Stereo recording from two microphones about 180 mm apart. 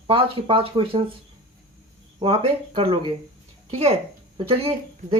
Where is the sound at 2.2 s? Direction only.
30° right (ahead or behind).